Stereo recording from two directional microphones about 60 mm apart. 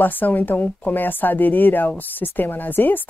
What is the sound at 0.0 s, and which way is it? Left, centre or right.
Speech, left.